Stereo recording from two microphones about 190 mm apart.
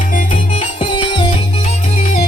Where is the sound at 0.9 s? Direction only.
25° left (ahead or behind).